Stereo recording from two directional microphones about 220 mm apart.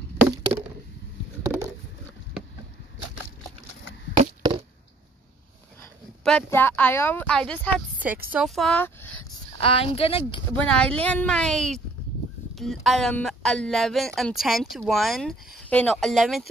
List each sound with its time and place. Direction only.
4.2 s a sound: 25° right (ahead or behind)
6.2 s speech: 5° left (ahead or behind)
8.0 s speech: 5° right (ahead or behind)
9.6 s speech: 25° left (ahead or behind)
10.5 s speech: 5° left (ahead or behind)